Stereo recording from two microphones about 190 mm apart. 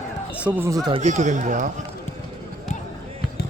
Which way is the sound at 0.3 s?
10° right (ahead or behind).